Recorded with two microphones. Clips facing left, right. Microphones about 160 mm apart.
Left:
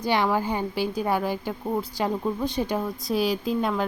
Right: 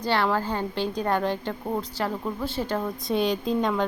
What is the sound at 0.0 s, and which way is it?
A woman's voice, 10° left (ahead or behind).